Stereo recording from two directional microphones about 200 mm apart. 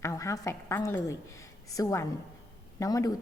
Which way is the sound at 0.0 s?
15° left (ahead or behind).